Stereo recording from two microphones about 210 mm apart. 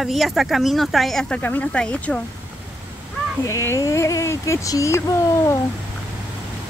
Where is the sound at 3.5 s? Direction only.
15° left (ahead or behind).